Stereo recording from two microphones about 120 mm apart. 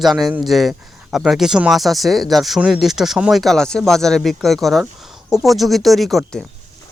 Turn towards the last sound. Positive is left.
turn(degrees=5)  # may be behind; listen again after turning